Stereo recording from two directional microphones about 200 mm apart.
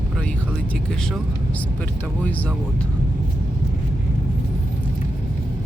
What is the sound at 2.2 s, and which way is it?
Speech, 10° left (ahead or behind).